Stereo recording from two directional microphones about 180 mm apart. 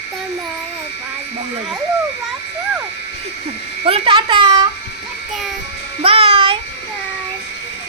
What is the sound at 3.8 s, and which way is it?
Speech, 30° right (ahead or behind).